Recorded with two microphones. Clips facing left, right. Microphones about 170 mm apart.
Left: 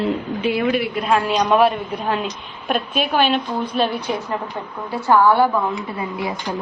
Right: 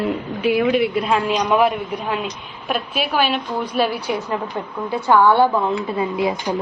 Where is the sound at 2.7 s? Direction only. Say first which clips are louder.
Left 2 dB; 5° right (ahead or behind).